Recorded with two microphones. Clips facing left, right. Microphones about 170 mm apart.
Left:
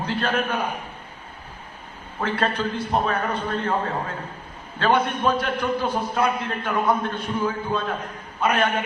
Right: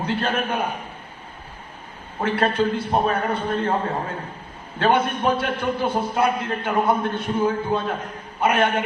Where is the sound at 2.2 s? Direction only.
25° right (ahead or behind).